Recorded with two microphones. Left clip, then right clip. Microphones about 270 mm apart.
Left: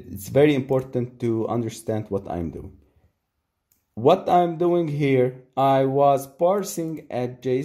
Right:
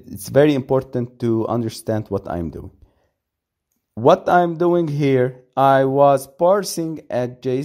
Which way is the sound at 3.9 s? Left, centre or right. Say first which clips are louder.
Right 4 dB; right.